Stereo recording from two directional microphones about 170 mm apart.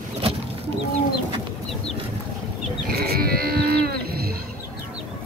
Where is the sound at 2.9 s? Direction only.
65° right (ahead or behind).